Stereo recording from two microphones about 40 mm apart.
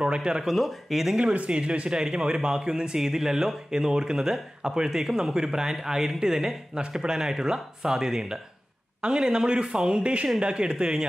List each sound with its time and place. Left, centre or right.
0.0 s speech: right
0.6 s speech: centre
1.5 s speech: right
2.0 s speech: centre